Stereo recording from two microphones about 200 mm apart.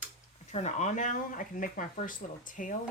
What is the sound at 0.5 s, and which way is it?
Speech, 35° left (ahead or behind).